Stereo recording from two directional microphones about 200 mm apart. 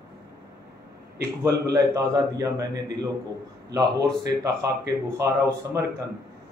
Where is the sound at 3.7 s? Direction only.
15° right (ahead or behind).